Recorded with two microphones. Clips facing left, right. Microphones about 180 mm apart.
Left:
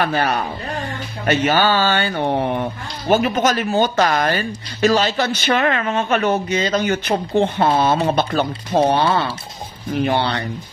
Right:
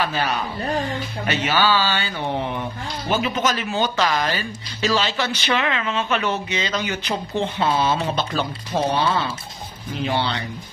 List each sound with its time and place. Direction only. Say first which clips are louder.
0.0 s speech: left 4 dB; 55° left (ahead or behind)